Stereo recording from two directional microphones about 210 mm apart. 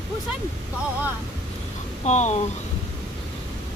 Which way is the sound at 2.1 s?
35° left (ahead or behind).